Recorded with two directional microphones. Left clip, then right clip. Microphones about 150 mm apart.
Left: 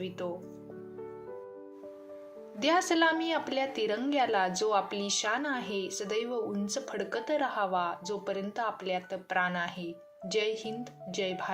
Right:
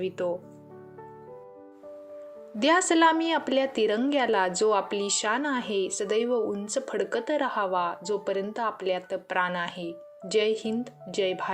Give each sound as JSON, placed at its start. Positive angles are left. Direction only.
{"t": 0.0, "sound": "speech", "side_deg": -40}
{"t": 2.6, "sound": "speech", "side_deg": -40}